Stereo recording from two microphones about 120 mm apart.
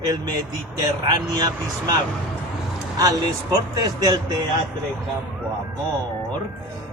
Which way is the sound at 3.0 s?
30° right (ahead or behind).